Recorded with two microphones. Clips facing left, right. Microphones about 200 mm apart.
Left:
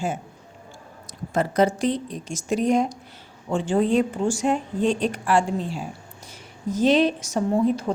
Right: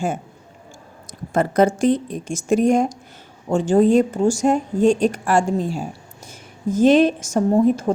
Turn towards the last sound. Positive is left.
turn(degrees=-45)  # may be behind; listen again after turning